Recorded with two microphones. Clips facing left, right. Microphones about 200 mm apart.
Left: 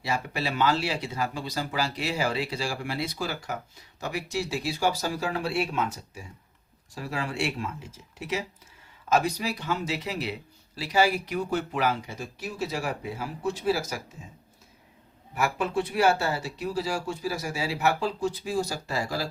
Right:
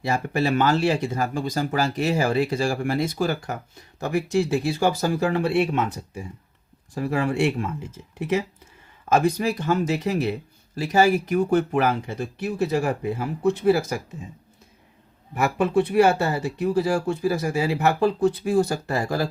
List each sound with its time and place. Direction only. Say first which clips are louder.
0.0 s speech: right 7 dB; 50° right (ahead or behind)
15.4 s speech: right 6 dB; 55° right (ahead or behind)